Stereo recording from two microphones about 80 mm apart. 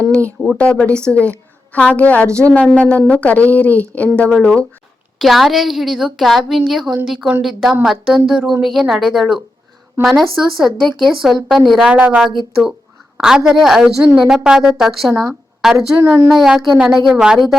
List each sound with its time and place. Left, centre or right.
0.5 s a woman's voice: centre
5.2 s a woman's voice: centre
11.9 s speech: centre
12.4 s a woman's voice: centre